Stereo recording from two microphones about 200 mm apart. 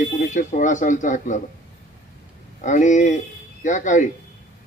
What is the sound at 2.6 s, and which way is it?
A man's voice, 40° left (ahead or behind).